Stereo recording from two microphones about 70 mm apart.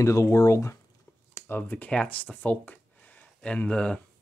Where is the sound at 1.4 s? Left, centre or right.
Left.